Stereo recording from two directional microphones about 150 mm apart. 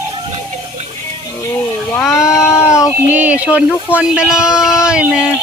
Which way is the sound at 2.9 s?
10° right (ahead or behind).